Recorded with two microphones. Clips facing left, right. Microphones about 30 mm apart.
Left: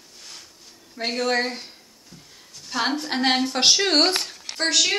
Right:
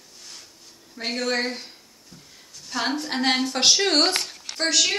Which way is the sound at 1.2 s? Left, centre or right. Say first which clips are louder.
Left 2 dB; centre.